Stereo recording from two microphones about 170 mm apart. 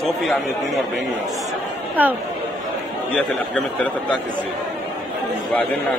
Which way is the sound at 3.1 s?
10° left (ahead or behind).